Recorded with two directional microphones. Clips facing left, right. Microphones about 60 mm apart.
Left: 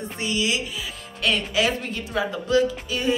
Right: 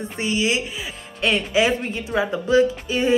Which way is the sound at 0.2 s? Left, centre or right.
Right.